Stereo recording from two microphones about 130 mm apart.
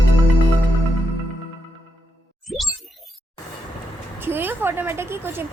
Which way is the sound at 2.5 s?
Centre (ahead or behind).